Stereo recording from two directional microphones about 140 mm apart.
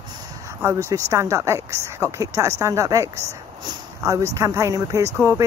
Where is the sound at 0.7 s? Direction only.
25° right (ahead or behind).